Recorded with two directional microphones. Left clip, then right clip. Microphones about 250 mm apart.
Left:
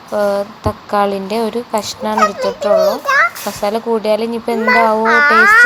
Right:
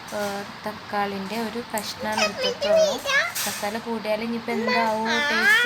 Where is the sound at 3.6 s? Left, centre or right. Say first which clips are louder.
Left 16 dB; left.